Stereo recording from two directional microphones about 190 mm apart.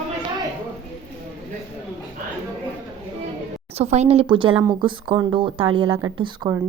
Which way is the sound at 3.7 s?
35° right (ahead or behind).